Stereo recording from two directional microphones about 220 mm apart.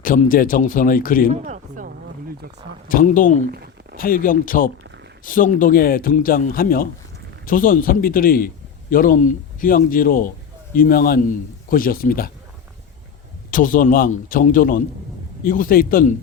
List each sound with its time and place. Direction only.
0.0 s speech: 35° left (ahead or behind)
1.3 s a sound: 30° right (ahead or behind)
2.9 s speech: 35° left (ahead or behind)
13.5 s speech: 35° left (ahead or behind)